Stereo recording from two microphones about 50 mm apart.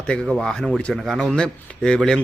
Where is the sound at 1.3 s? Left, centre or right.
Centre.